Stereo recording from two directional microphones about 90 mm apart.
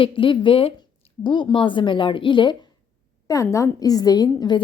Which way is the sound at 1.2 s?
65° left (ahead or behind).